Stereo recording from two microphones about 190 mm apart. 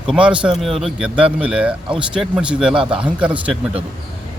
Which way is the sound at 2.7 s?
25° right (ahead or behind).